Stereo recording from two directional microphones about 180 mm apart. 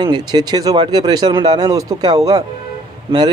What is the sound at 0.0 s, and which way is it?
Speech, 25° right (ahead or behind).